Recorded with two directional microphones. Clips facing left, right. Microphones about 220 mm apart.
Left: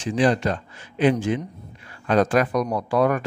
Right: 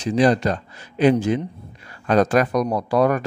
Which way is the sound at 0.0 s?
40° right (ahead or behind).